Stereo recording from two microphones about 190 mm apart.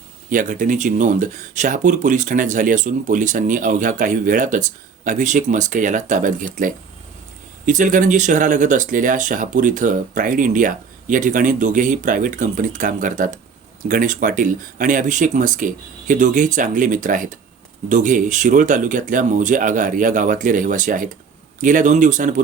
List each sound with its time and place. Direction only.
0.3 s speech: 45° right (ahead or behind)